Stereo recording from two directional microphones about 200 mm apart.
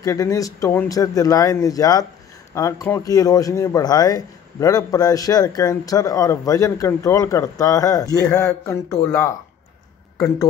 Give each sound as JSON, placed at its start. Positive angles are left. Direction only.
{"t": 0.0, "sound": "a man's voice", "side_deg": 15}